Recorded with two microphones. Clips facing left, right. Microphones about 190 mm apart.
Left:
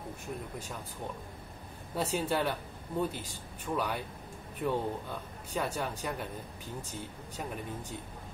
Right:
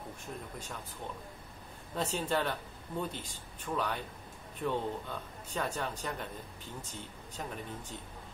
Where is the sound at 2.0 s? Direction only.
10° left (ahead or behind).